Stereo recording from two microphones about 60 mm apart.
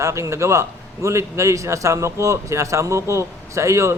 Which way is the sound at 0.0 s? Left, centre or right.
Right.